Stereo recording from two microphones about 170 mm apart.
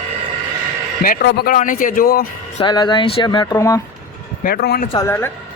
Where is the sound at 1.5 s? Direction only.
50° left (ahead or behind).